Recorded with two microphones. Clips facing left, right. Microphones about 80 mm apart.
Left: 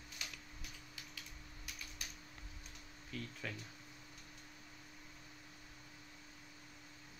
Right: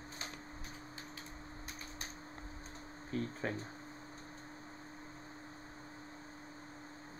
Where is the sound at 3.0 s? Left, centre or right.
Right.